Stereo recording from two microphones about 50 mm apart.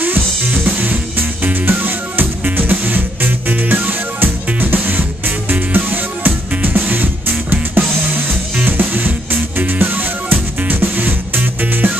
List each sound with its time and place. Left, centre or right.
0.0 s music: right